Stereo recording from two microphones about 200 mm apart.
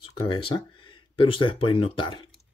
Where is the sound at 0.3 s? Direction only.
25° left (ahead or behind).